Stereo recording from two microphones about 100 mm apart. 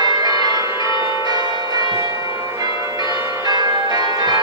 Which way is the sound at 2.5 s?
35° right (ahead or behind).